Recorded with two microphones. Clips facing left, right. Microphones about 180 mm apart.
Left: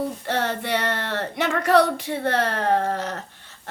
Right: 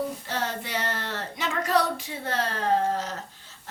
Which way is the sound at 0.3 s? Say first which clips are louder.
Left 7 dB; 65° left (ahead or behind).